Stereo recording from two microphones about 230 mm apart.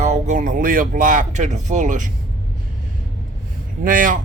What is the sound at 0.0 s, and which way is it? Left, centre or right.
Speech, right.